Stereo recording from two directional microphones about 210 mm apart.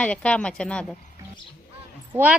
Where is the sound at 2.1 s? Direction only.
10° right (ahead or behind).